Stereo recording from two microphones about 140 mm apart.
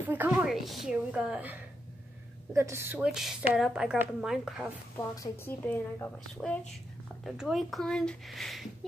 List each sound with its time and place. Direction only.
0.0 s a woman's voice: 15° right (ahead or behind)
0.5 s a woman's voice: centre (ahead or behind)
2.5 s a woman's voice: 20° right (ahead or behind); by 4.6 s 5° right (ahead or behind)
4.9 s a woman's voice: 25° left (ahead or behind)
5.7 s speech: 15° left (ahead or behind)
7.2 s a woman's voice: 5° right (ahead or behind)